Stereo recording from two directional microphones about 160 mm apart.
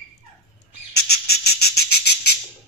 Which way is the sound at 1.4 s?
90° left.